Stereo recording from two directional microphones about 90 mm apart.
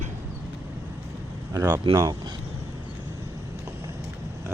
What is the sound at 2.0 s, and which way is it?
Speech, 40° right (ahead or behind).